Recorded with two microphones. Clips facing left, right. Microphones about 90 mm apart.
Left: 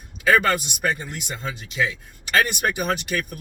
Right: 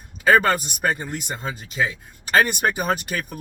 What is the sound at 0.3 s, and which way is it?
Speech, 40° right (ahead or behind).